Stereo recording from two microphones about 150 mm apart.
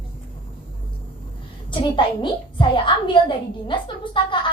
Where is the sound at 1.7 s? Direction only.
35° left (ahead or behind).